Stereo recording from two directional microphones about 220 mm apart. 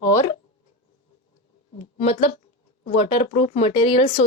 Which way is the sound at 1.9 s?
25° left (ahead or behind).